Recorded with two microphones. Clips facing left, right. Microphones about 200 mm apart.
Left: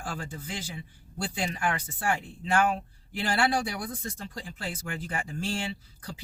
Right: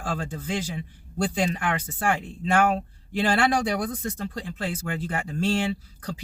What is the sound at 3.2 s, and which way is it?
Speech, 70° right (ahead or behind).